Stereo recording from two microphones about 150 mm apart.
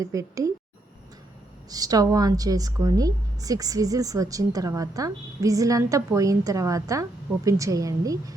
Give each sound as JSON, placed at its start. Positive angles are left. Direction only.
{"t": 0.0, "sound": "a woman's voice", "side_deg": -20}
{"t": 1.7, "sound": "a woman's voice", "side_deg": -25}